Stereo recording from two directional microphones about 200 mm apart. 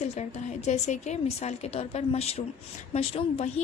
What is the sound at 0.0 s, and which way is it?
A woman's voice, 35° left (ahead or behind).